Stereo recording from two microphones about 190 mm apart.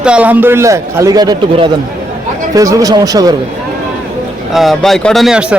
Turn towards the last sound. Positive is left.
turn(degrees=-5)  # may be behind; listen again after turning